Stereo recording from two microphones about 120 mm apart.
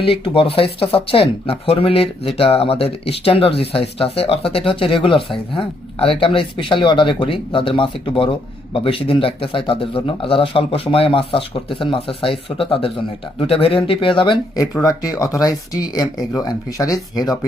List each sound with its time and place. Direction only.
0.0 s speech: 50° left (ahead or behind)
14.5 s speech: 30° left (ahead or behind)